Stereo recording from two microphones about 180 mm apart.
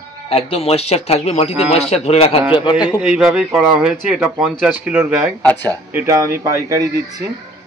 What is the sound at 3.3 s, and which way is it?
Speech, 5° right (ahead or behind).